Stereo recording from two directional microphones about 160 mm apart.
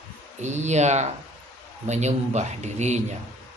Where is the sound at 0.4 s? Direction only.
45° right (ahead or behind).